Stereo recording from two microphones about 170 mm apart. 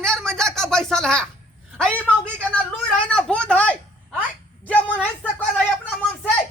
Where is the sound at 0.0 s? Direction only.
5° left (ahead or behind).